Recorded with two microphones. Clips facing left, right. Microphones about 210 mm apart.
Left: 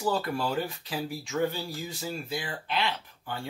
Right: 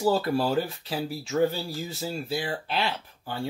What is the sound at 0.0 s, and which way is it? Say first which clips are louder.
Speech: right 5 dB; 35° right (ahead or behind).